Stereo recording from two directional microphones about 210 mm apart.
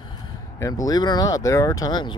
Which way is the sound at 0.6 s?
15° left (ahead or behind).